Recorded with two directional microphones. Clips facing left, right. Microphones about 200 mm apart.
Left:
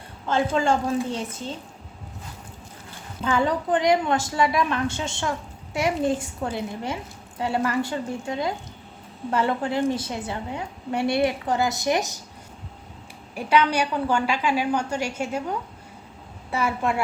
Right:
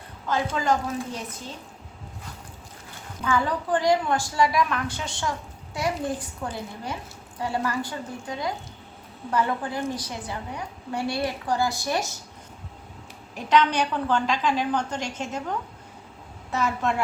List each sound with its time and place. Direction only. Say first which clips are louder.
0.3 s a woman's voice: left 3 dB; 25° left (ahead or behind)
3.2 s a woman's voice: left 2 dB; 20° left (ahead or behind)
9.3 s a woman's voice: left 2 dB; 25° left (ahead or behind)
13.3 s a woman's voice: left 1 dB; 10° left (ahead or behind)